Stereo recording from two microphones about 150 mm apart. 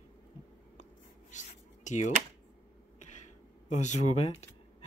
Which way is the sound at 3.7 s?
50° left (ahead or behind).